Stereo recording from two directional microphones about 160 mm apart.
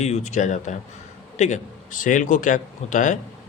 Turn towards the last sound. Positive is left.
turn(degrees=50)  # may be behind; listen again after turning